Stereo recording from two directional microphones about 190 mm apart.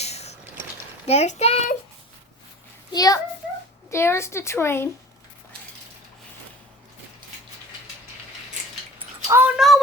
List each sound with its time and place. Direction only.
0.0 s a sound: 35° left (ahead or behind)
1.0 s a child's voice: 35° left (ahead or behind)
2.9 s a child's voice: 20° left (ahead or behind)
9.2 s speech: 15° right (ahead or behind)
9.6 s speech: centre (ahead or behind)